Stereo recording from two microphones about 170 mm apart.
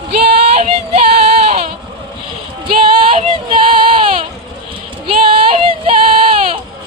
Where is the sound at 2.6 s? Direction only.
30° right (ahead or behind).